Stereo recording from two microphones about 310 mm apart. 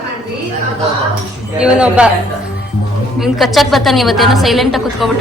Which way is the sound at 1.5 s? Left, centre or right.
Centre.